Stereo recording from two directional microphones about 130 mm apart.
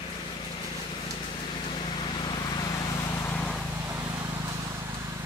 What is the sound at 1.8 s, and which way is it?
Vehicle, 35° left (ahead or behind).